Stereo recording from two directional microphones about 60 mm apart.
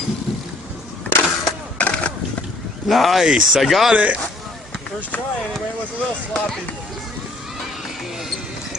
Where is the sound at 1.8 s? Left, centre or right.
Centre.